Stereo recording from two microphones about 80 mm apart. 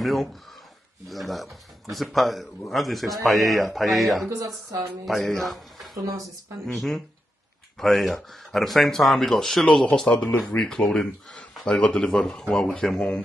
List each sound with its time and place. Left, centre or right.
0.0 s a man's voice: centre
6.0 s speech: right
7.7 s speech: centre